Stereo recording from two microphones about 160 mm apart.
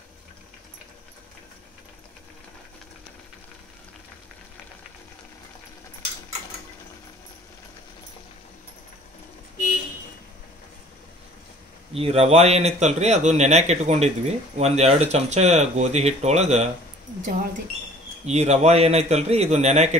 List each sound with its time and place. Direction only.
11.9 s a man's voice: 40° right (ahead or behind)
18.2 s a man's voice: 45° right (ahead or behind)